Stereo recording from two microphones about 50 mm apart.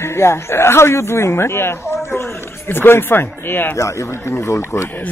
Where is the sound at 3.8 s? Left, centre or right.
Left.